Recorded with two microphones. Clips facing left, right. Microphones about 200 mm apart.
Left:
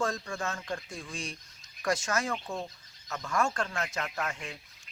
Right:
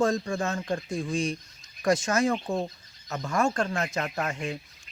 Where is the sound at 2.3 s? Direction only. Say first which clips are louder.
Right 7 dB; 35° right (ahead or behind).